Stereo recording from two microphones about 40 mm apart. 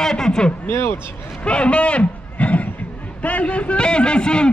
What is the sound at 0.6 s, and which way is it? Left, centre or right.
Speech, left.